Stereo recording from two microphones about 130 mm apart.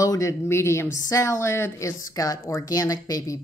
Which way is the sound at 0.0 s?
25° left (ahead or behind).